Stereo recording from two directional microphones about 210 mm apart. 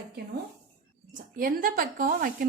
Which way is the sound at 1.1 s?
40° right (ahead or behind).